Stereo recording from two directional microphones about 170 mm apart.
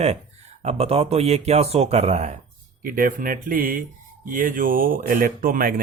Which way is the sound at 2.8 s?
55° right (ahead or behind).